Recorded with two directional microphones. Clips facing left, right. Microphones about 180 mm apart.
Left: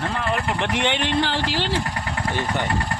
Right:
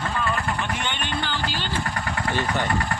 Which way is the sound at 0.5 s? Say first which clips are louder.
Left 6 dB; 80° left.